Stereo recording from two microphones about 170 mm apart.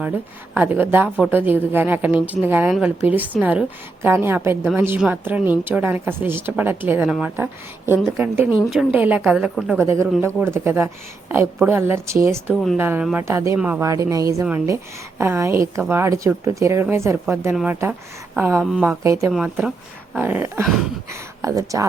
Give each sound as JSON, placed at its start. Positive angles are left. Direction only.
{"t": 0.5, "sound": "a woman's voice", "side_deg": -10}
{"t": 17.5, "sound": "speech", "side_deg": -5}
{"t": 18.9, "sound": "a woman's voice", "side_deg": -15}